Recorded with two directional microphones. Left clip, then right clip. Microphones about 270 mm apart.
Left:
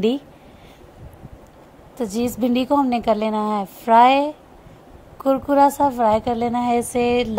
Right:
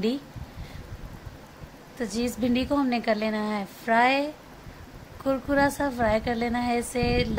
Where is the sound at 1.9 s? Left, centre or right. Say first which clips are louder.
Left 6 dB; left.